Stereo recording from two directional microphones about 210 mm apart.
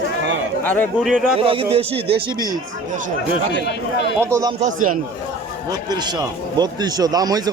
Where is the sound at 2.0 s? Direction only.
50° right (ahead or behind).